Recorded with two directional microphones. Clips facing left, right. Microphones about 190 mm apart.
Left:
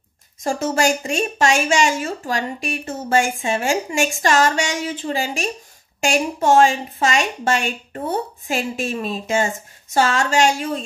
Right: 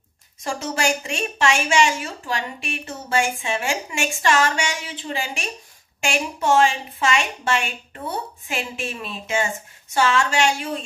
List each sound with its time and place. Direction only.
0.4 s a woman's voice: 45° left (ahead or behind)